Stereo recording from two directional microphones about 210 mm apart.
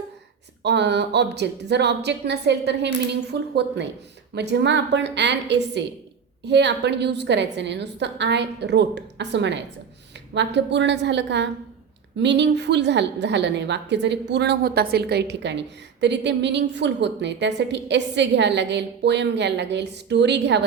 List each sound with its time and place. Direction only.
0.6 s a woman's voice: 55° right (ahead or behind)